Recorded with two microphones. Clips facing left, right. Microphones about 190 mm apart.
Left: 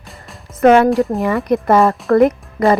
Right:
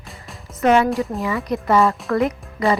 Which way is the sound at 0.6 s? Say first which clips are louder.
Left 6 dB; 55° left (ahead or behind).